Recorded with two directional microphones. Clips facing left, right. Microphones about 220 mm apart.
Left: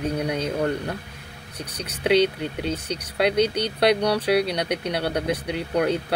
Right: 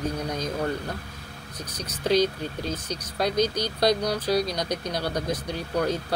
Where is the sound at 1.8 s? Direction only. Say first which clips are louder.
Left 3 dB; 65° left (ahead or behind).